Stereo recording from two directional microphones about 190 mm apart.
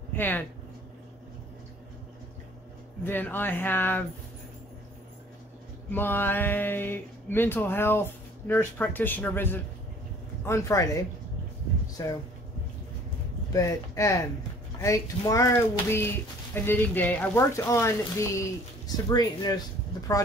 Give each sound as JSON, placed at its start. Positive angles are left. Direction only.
{"t": 0.1, "sound": "speech", "side_deg": 10}
{"t": 3.1, "sound": "speech", "side_deg": 10}
{"t": 5.9, "sound": "speech", "side_deg": 10}
{"t": 13.5, "sound": "speech", "side_deg": 15}